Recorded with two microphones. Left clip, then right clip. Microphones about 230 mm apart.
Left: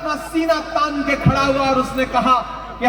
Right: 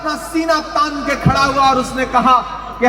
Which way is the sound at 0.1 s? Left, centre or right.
Right.